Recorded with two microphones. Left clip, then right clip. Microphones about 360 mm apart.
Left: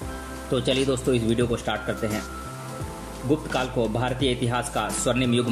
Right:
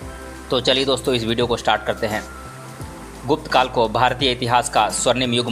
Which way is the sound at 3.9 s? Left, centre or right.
Centre.